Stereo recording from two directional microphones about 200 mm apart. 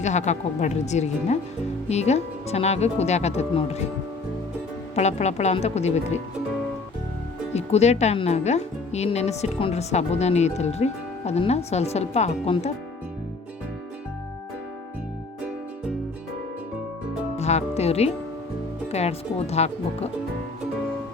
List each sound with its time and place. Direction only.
0.0 s speech: 35° left (ahead or behind)
4.9 s speech: 35° left (ahead or behind)
7.5 s speech: 35° left (ahead or behind)
17.3 s speech: 35° left (ahead or behind)